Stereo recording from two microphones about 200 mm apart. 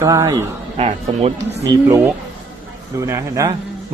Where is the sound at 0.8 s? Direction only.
30° right (ahead or behind).